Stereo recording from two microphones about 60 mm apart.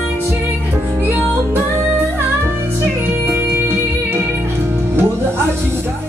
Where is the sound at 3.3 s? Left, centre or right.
Right.